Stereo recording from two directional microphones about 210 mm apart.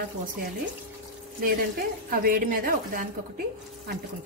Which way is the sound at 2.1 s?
45° right (ahead or behind).